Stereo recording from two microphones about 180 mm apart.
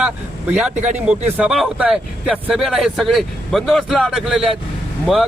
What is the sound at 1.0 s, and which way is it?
Speech, 5° right (ahead or behind).